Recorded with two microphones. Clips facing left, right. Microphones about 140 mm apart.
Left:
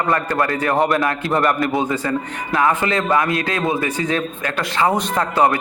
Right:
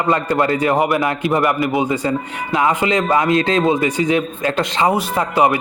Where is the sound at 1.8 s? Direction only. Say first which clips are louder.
Right 2 dB; 20° right (ahead or behind).